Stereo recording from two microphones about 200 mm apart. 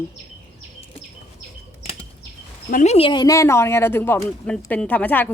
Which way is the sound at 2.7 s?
35° left (ahead or behind).